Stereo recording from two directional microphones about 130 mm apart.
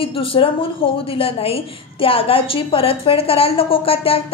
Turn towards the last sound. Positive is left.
turn(degrees=45)  # may be behind; listen again after turning